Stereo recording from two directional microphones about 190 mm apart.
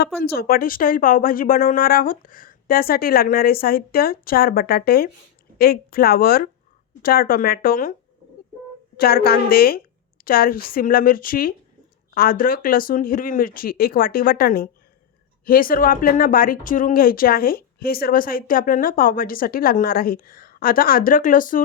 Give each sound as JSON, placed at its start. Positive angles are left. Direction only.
{"t": 0.2, "sound": "speech", "side_deg": 50}
{"t": 9.0, "sound": "speech", "side_deg": 50}